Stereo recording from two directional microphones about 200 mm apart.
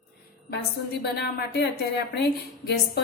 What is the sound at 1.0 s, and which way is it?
Speech, 55° left (ahead or behind).